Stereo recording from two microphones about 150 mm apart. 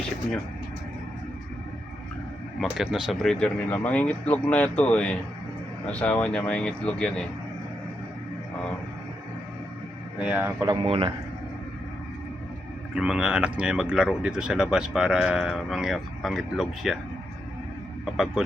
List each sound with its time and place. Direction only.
2.7 s speech: 5° right (ahead or behind)
10.2 s speech: 10° right (ahead or behind)
10.8 s a man's voice: 40° right (ahead or behind)
13.0 s speech: 5° right (ahead or behind)
18.0 s speech: centre (ahead or behind)